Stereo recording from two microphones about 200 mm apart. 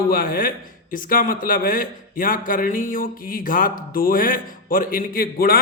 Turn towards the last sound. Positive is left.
turn(degrees=45)  # may be behind; listen again after turning